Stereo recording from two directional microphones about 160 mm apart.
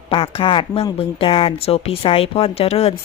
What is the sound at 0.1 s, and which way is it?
Speech, 35° left (ahead or behind).